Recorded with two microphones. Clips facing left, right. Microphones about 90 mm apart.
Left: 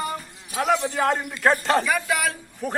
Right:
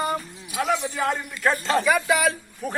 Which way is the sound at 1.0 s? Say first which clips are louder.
Left 3 dB; 40° left (ahead or behind).